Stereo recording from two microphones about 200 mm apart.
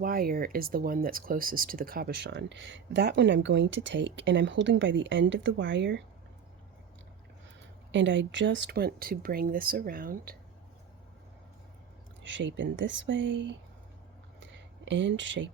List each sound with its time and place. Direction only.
0.0 s speech: 45° right (ahead or behind); by 6.0 s 65° right (ahead or behind)
7.9 s speech: 65° right (ahead or behind); by 10.3 s 45° right (ahead or behind)
12.2 s speech: 65° right (ahead or behind)
14.3 s a sound: 65° right (ahead or behind)